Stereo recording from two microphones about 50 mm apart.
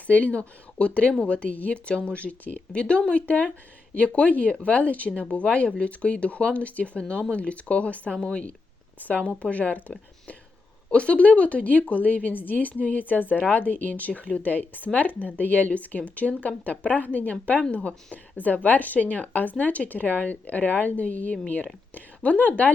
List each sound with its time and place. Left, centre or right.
0.1 s a woman's voice: left